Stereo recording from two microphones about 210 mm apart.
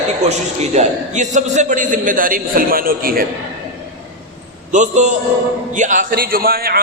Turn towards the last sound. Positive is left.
turn(degrees=-45)  # may be behind; listen again after turning